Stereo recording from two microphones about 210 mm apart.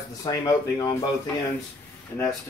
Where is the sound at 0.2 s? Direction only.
15° left (ahead or behind).